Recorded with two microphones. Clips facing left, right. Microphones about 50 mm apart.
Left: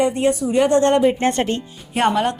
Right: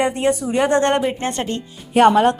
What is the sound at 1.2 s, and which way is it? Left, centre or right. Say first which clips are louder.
Speech: left 5 dB; left.